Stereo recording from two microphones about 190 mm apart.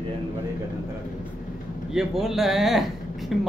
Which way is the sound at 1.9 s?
Centre (ahead or behind).